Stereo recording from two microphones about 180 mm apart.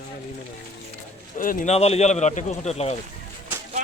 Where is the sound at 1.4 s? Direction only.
50° left (ahead or behind).